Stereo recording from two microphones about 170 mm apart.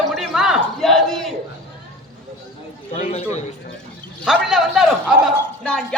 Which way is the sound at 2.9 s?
40° left (ahead or behind).